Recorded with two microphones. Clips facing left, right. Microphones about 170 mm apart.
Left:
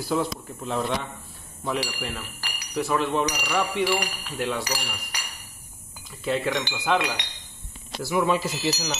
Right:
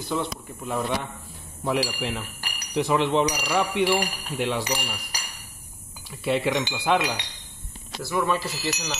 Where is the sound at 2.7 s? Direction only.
20° right (ahead or behind).